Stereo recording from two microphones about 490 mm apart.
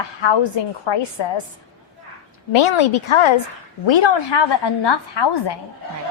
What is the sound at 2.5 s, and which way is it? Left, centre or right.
Speech, left.